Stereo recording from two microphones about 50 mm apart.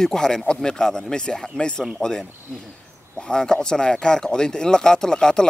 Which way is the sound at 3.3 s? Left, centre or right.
Centre.